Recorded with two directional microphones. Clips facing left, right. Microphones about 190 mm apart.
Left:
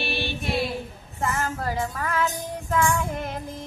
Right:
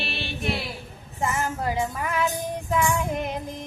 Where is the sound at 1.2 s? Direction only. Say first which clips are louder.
Right 1 dB; 15° right (ahead or behind).